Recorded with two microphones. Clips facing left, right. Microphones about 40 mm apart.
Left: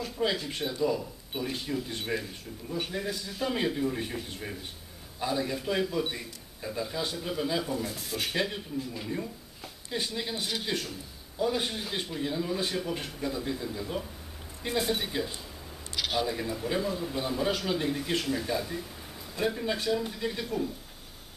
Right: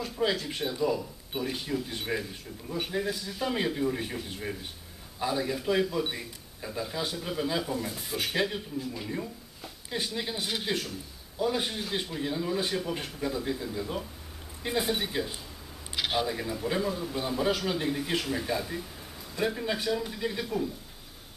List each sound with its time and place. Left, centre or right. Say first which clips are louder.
0.0 s a man's voice: right 1 dB; centre
15.9 s a sound: right 1 dB; centre
16.3 s a man's voice: even; centre